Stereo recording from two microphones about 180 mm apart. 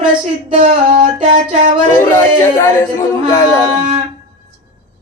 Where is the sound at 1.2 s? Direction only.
45° right (ahead or behind).